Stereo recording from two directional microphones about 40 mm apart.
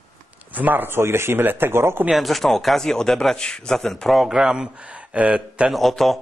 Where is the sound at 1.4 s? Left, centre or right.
Right.